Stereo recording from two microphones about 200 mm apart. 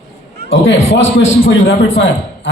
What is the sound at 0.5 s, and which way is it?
A man's voice, 70° left (ahead or behind).